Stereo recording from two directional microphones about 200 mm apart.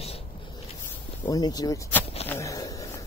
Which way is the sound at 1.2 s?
20° left (ahead or behind).